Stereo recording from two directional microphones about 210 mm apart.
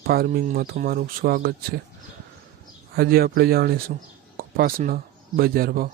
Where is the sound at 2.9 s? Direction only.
45° right (ahead or behind).